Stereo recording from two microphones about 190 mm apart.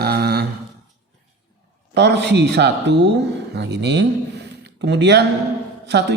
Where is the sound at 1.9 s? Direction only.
65° right (ahead or behind).